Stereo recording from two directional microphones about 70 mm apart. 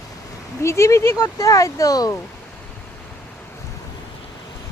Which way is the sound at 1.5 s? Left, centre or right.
Left.